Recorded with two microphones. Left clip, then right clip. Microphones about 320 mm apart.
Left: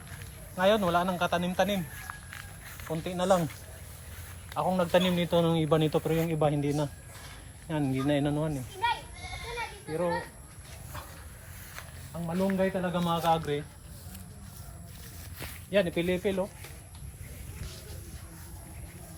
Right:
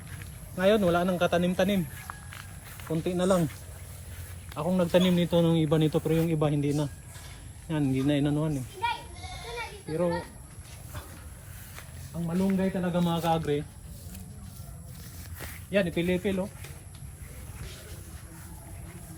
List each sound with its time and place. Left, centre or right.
0.5 s speech: centre
2.1 s a sound: centre
2.9 s speech: left
4.5 s speech: left
12.2 s speech: centre
15.7 s speech: left